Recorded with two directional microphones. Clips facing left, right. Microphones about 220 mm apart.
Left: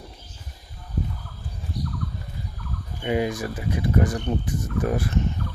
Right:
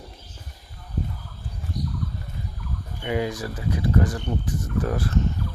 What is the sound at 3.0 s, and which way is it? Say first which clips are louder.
Speech: left 2 dB; 20° left (ahead or behind).